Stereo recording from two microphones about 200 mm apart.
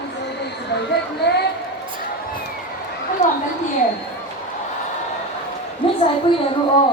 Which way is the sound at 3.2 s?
35° left (ahead or behind).